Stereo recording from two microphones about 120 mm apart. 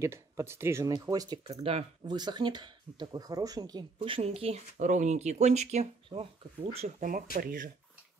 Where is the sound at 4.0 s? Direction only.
50° right (ahead or behind).